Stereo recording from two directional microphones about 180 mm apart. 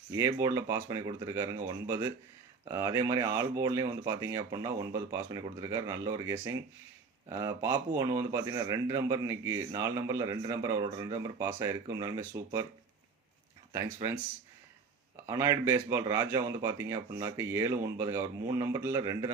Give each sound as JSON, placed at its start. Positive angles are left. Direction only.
{"t": 0.1, "sound": "speech", "side_deg": -20}
{"t": 13.7, "sound": "speech", "side_deg": -15}